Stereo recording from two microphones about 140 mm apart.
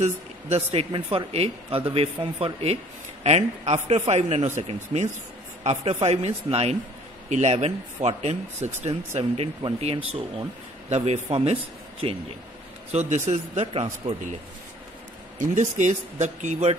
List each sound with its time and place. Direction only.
0.0 s speech: 45° right (ahead or behind)
12.9 s speech: 55° right (ahead or behind)
15.4 s speech: 60° right (ahead or behind)